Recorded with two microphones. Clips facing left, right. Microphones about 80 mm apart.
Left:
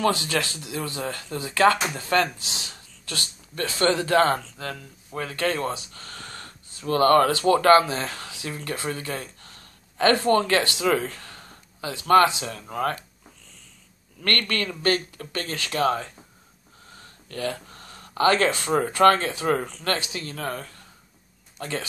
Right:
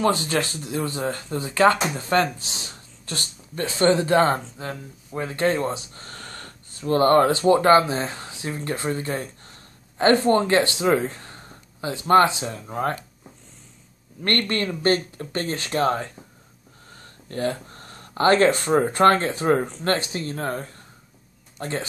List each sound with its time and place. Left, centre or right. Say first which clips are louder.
0.0 s speech: right 2 dB; right
6.9 s speech: right 1 dB; right
14.2 s speech: right 2 dB; right
17.3 s speech: right 4 dB; right